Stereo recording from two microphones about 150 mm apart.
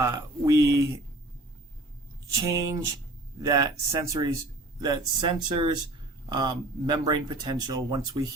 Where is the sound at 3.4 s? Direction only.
20° right (ahead or behind).